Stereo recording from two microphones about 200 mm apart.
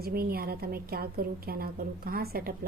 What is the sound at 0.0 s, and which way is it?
A woman's voice, 50° right (ahead or behind).